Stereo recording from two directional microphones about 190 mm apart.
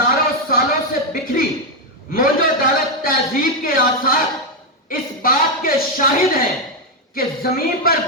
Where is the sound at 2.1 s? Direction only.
50° left (ahead or behind).